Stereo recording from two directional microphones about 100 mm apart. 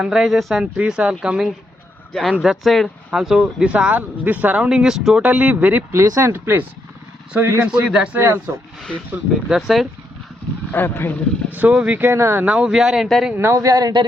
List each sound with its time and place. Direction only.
0.0 s speech: 5° right (ahead or behind)
5.9 s speech: 30° right (ahead or behind)
7.7 s speech: 10° right (ahead or behind)
8.2 s speech: 25° right (ahead or behind)
9.5 s speech: 5° right (ahead or behind)
10.7 s speech: 20° left (ahead or behind)
11.5 s speech: 15° right (ahead or behind)
13.3 s speech: 30° right (ahead or behind)